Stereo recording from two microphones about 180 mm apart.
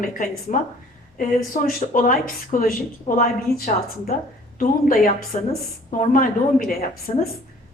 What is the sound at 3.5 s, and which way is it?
A woman's voice, 60° left (ahead or behind).